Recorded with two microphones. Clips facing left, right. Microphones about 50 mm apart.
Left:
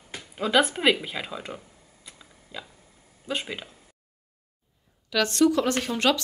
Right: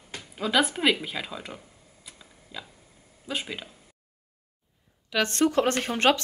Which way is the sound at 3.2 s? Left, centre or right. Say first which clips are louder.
Left 2 dB; centre.